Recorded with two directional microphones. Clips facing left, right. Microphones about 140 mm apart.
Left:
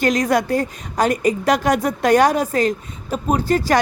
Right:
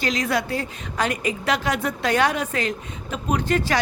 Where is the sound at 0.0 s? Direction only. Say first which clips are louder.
Left 6 dB; 45° left (ahead or behind).